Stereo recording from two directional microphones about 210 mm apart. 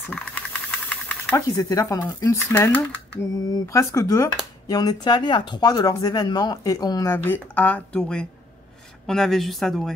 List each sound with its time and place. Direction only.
0.0 s speech: 5° left (ahead or behind)